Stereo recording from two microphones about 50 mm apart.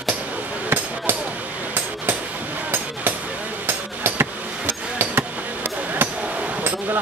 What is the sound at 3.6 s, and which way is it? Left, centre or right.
Hammer, right.